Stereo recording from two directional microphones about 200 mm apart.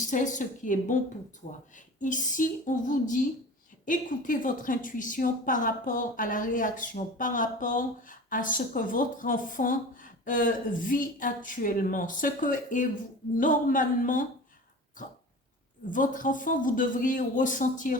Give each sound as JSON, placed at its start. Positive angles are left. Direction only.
{"t": 0.1, "sound": "a woman's voice", "side_deg": 40}
{"t": 2.0, "sound": "a woman's voice", "side_deg": 40}
{"t": 15.9, "sound": "a woman's voice", "side_deg": 40}